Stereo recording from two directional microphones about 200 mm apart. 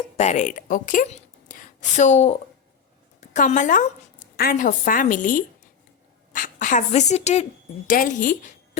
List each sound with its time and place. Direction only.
0.2 s a woman's voice: 35° left (ahead or behind)